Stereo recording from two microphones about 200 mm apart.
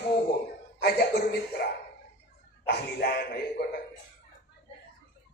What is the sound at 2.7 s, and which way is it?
Speech, 50° left (ahead or behind).